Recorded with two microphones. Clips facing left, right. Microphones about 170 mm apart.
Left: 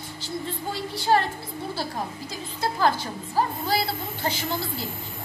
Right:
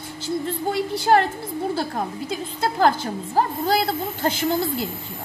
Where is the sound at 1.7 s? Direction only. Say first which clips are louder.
Right 5 dB; 55° right (ahead or behind).